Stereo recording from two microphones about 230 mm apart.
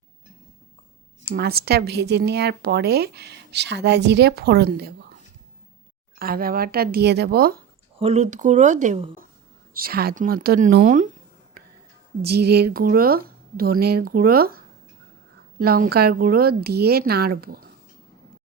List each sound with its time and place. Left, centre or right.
1.3 s a woman's voice: right
6.1 s speech: right
7.9 s speech: right
9.7 s speech: right
12.2 s speech: right